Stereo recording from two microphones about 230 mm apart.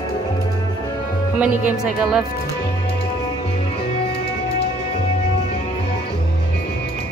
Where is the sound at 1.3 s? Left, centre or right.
Centre.